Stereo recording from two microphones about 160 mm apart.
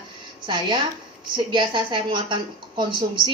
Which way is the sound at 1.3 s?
30° right (ahead or behind).